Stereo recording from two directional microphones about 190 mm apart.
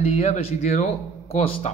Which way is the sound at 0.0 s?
35° left (ahead or behind).